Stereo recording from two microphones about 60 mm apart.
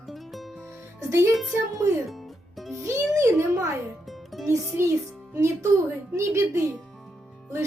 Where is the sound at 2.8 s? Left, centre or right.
Right.